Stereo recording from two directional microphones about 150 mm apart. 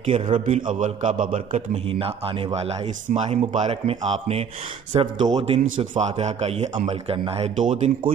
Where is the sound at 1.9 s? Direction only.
35° right (ahead or behind).